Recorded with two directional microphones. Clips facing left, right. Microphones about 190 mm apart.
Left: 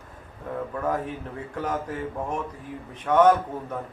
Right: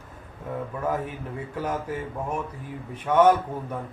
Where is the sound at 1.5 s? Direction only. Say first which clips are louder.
Even; 10° right (ahead or behind).